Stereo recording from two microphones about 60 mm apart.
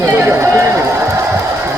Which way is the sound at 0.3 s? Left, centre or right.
Right.